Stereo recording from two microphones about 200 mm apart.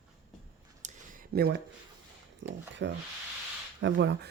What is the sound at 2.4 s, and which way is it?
Speech, 65° right (ahead or behind).